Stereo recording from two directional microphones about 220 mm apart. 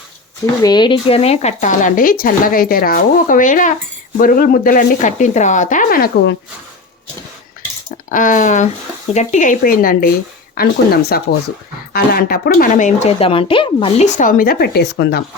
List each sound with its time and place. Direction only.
0.6 s speech: 20° left (ahead or behind); by 6.3 s 40° left (ahead or behind)
8.1 s speech: 35° left (ahead or behind)